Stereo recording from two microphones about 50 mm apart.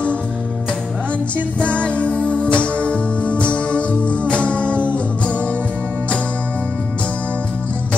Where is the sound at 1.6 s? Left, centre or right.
Left.